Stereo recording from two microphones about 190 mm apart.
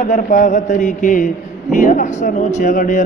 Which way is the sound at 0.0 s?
40° left (ahead or behind).